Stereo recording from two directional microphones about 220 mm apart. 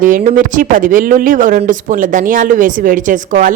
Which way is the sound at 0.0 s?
35° right (ahead or behind).